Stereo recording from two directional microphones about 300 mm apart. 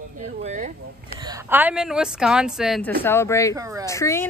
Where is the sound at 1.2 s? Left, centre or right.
Centre.